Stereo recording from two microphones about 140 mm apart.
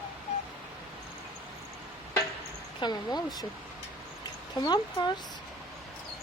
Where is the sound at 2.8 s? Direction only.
30° left (ahead or behind).